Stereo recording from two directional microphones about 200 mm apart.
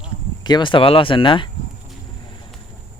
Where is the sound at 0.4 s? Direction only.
20° left (ahead or behind).